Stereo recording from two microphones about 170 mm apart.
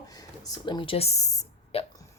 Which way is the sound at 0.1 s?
20° left (ahead or behind).